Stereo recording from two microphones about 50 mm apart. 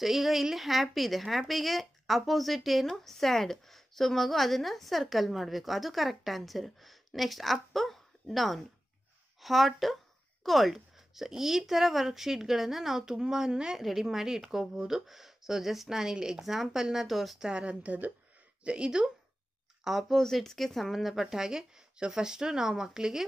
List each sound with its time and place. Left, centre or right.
0.0 s speech: centre
17.5 s speech: right
19.8 s speech: centre